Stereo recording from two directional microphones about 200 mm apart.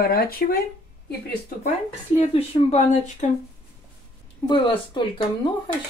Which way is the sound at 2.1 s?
30° left (ahead or behind).